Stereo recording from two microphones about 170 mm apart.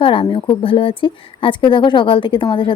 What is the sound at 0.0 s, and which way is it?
A woman's voice, 30° left (ahead or behind).